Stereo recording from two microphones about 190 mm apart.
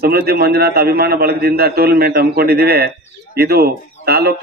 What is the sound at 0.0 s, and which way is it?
A man's voice, 55° right (ahead or behind).